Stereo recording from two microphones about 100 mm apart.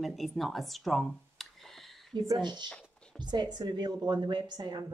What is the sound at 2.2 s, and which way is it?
A woman's voice, 45° right (ahead or behind).